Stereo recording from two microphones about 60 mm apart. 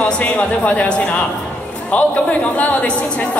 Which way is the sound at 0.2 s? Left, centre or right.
Left.